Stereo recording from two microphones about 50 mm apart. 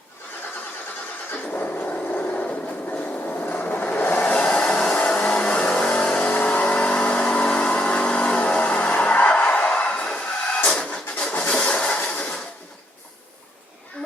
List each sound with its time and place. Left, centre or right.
1.3 s a sound: left
2.3 s train: left
4.2 s vehicle: centre
6.3 s vehicle: left
8.7 s music: left
9.3 s a sound: left